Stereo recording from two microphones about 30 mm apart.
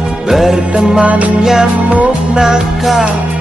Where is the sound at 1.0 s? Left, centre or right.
Right.